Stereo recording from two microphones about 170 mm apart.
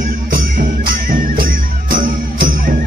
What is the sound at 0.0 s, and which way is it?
Music, 55° right (ahead or behind).